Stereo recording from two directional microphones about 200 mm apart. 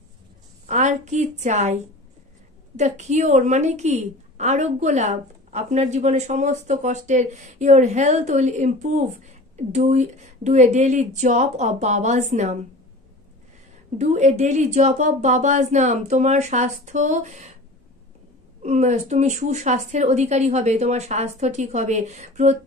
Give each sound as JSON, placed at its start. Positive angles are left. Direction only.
{"t": 0.7, "sound": "a woman's voice", "side_deg": -35}
{"t": 13.9, "sound": "a woman's voice", "side_deg": -35}
{"t": 18.6, "sound": "a woman's voice", "side_deg": -35}